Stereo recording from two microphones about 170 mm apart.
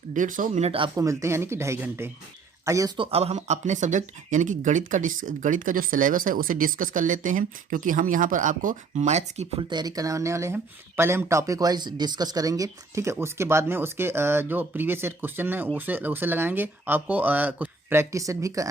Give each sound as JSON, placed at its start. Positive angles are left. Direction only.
{"t": 0.1, "sound": "speech", "side_deg": -50}
{"t": 0.9, "sound": "speech", "side_deg": -15}
{"t": 3.0, "sound": "speech", "side_deg": -35}
{"t": 9.6, "sound": "speech", "side_deg": -25}